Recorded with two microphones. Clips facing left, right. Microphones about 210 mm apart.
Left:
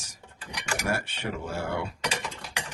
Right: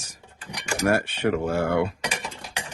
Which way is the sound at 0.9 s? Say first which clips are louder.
Right 11 dB; 60° right (ahead or behind).